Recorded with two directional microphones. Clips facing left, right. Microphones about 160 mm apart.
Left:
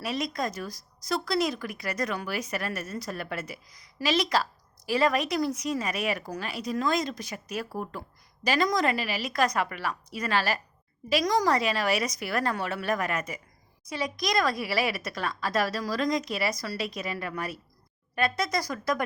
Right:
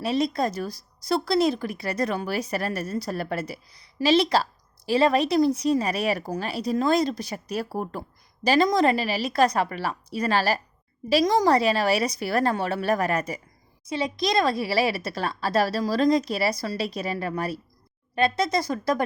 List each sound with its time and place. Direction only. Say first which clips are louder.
0.0 s speech: right 6 dB; 30° right (ahead or behind)